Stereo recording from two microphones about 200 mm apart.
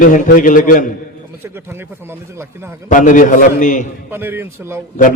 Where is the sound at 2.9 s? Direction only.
40° left (ahead or behind).